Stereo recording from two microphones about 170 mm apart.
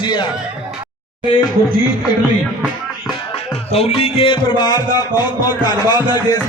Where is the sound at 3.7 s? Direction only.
35° left (ahead or behind).